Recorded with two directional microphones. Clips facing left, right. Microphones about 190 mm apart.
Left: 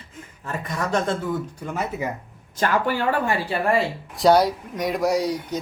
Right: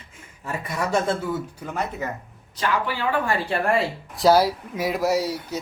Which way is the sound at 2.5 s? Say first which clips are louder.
Left 3 dB; 45° left (ahead or behind).